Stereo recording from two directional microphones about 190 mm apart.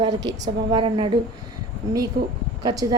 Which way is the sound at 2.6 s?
20° right (ahead or behind).